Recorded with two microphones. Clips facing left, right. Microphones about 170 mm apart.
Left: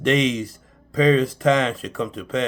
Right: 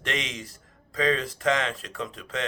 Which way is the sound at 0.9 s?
15° left (ahead or behind).